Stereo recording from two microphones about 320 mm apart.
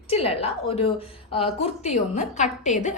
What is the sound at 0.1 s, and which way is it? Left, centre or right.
A woman's voice, centre.